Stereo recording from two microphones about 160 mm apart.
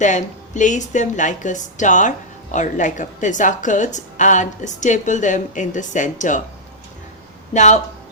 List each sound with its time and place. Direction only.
0.0 s a woman's voice: 50° left (ahead or behind)
7.5 s a woman's voice: 50° left (ahead or behind)